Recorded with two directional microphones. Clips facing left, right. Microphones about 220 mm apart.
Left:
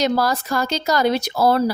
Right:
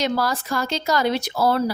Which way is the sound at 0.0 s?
40° left (ahead or behind).